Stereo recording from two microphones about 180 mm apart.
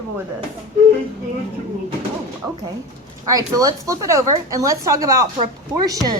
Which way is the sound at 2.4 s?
15° right (ahead or behind).